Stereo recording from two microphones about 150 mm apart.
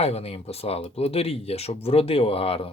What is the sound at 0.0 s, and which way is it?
Speech, 40° left (ahead or behind).